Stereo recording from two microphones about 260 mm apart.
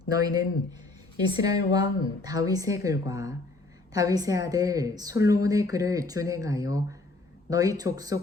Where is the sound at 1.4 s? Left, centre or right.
Centre.